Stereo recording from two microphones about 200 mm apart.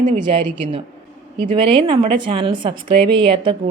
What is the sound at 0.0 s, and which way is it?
A woman's voice, 35° right (ahead or behind).